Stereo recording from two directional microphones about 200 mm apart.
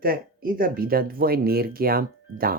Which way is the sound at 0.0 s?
45° right (ahead or behind).